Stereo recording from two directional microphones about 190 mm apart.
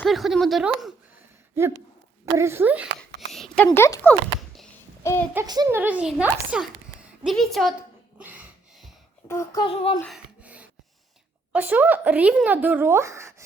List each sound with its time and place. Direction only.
0.0 s speech: centre (ahead or behind)
3.2 s a sound: centre (ahead or behind)
3.7 s speech: 15° left (ahead or behind)
5.3 s speech: 20° right (ahead or behind)
5.8 s speech: 5° right (ahead or behind)
9.2 s a child's voice: 15° left (ahead or behind)
9.6 s speech: 30° left (ahead or behind)
10.4 s rub: 5° right (ahead or behind)
11.5 s speech: 10° right (ahead or behind)